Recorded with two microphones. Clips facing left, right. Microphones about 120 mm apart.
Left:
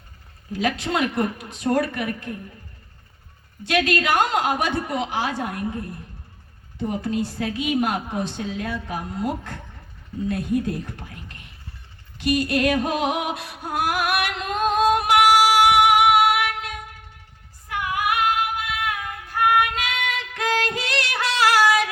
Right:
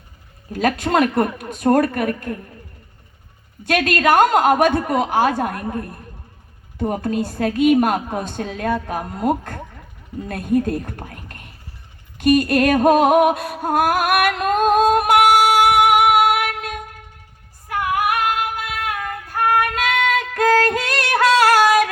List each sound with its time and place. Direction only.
0.5 s a woman's voice: 50° right (ahead or behind)
3.6 s a woman's voice: 50° right (ahead or behind)
12.1 s a sound: 50° right (ahead or behind)
17.7 s female singing: 50° right (ahead or behind)